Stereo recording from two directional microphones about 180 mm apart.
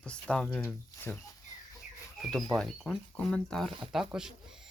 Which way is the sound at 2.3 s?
Centre (ahead or behind).